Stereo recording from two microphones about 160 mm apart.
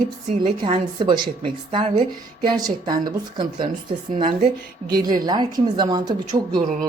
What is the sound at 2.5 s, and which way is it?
Speech, 25° right (ahead or behind).